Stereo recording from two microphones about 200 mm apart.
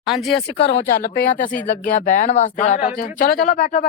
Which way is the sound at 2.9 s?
40° left (ahead or behind).